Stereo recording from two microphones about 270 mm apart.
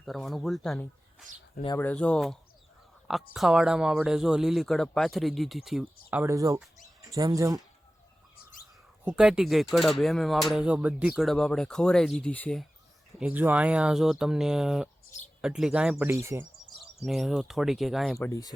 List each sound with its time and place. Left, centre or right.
0.0 s speech: centre
9.0 s speech: centre
16.6 s speech: centre
18.3 s speech: centre